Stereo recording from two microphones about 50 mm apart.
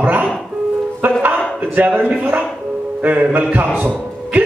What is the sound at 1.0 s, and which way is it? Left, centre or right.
A man's voice, right.